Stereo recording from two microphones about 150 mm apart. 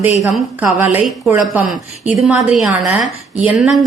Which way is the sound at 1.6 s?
5° right (ahead or behind).